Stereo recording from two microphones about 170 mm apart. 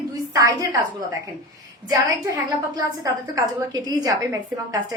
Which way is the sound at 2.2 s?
20° right (ahead or behind).